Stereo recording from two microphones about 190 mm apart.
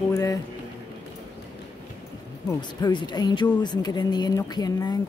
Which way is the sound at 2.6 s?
25° left (ahead or behind).